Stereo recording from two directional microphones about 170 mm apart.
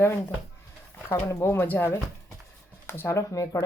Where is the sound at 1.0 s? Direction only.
15° left (ahead or behind).